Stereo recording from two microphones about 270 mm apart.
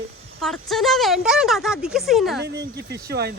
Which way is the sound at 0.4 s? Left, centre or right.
Centre.